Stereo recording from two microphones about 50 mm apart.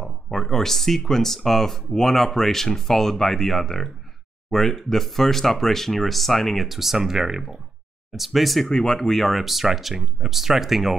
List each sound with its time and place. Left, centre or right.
0.3 s speech: centre
8.6 s speech: centre